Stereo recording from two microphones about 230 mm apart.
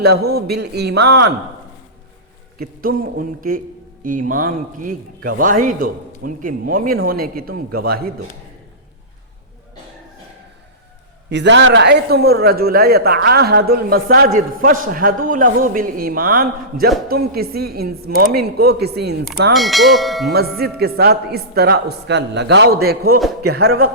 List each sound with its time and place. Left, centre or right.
0.0 s a man's voice: right
2.6 s a man's voice: right
11.3 s a man's voice: right
19.5 s bell: centre
20.3 s a man's voice: right